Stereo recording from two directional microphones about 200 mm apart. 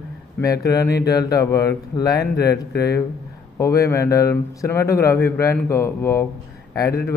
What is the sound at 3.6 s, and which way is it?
Speech, 15° left (ahead or behind).